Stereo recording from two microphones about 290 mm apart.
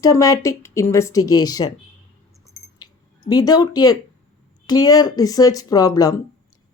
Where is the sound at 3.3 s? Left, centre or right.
Centre.